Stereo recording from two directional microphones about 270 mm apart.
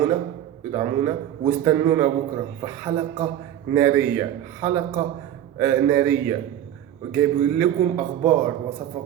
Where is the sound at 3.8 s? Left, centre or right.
Centre.